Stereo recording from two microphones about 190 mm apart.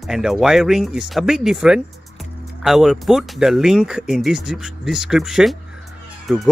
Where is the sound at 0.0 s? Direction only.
Centre (ahead or behind).